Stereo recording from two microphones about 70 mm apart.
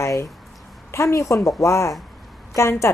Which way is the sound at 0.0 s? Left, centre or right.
Left.